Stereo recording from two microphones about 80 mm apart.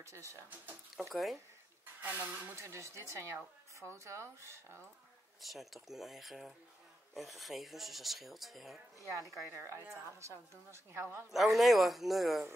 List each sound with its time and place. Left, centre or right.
0.0 s a woman's voice: right
0.9 s speech: centre
2.0 s speech: right
2.5 s a woman's voice: right
5.4 s speech: centre
9.5 s a woman's voice: right
11.3 s speech: centre